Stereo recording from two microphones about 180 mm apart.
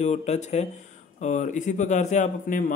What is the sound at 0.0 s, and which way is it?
Speech, 40° left (ahead or behind).